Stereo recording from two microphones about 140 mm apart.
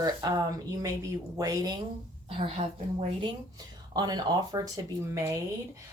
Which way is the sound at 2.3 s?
40° right (ahead or behind).